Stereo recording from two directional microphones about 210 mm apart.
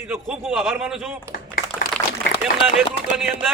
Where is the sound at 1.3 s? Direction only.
45° left (ahead or behind).